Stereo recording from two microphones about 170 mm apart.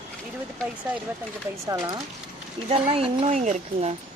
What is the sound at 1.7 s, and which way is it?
Speech, 25° right (ahead or behind).